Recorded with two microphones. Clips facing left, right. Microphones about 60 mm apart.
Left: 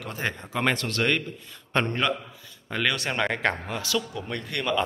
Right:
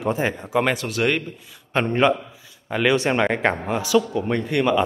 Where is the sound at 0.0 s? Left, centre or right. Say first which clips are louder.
Right 8 dB; centre.